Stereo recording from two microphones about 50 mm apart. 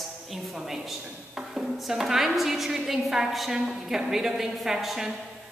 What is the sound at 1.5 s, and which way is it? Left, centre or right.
A woman's voice, centre.